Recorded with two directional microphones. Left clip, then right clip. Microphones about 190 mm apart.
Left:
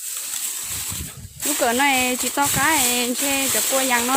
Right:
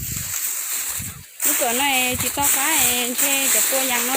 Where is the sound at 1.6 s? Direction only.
25° left (ahead or behind).